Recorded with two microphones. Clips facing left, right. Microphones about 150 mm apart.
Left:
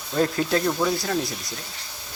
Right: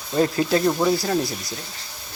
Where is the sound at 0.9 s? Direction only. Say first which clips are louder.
Right 4 dB; centre (ahead or behind).